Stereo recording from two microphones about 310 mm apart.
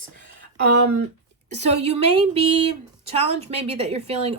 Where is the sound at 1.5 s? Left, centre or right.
Right.